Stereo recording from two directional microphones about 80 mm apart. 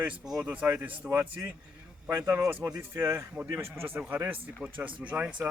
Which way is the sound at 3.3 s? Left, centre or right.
Right.